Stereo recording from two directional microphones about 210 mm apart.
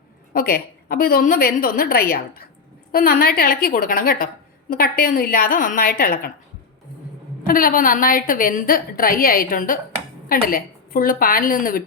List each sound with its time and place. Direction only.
0.3 s a woman's voice: 45° left (ahead or behind)
7.4 s a woman's voice: 40° left (ahead or behind)